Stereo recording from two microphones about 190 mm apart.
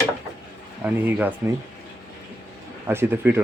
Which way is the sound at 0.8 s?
10° right (ahead or behind).